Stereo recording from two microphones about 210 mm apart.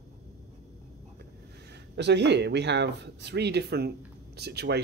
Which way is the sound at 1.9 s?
55° right (ahead or behind).